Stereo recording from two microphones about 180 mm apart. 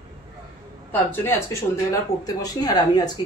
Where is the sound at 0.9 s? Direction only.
10° left (ahead or behind).